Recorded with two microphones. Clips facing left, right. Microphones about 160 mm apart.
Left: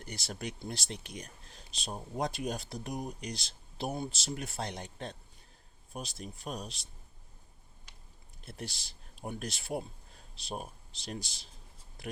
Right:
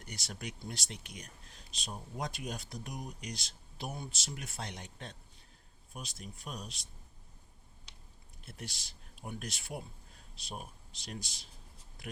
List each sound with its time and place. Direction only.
0.0 s speech: 30° left (ahead or behind)
8.4 s speech: 30° left (ahead or behind)
12.0 s a sound: 30° left (ahead or behind)